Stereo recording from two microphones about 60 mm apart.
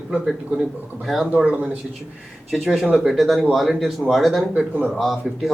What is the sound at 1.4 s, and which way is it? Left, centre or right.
Speech, right.